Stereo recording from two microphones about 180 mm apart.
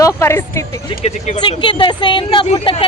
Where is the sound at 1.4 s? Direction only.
25° left (ahead or behind).